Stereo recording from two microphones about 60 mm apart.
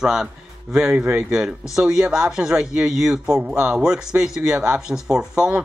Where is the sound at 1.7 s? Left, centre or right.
Centre.